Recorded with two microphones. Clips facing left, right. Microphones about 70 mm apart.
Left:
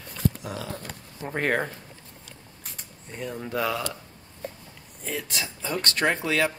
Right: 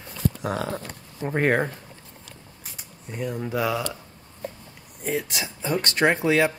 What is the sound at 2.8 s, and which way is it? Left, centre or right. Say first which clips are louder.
Speech: right 4 dB; centre.